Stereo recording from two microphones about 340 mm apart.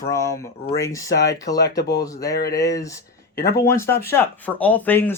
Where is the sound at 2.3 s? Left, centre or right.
Left.